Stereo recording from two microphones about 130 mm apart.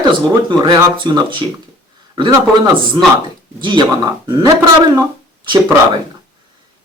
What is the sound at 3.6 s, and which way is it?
Speech, 35° right (ahead or behind).